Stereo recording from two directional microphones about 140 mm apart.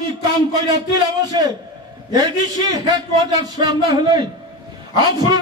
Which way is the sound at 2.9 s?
30° right (ahead or behind).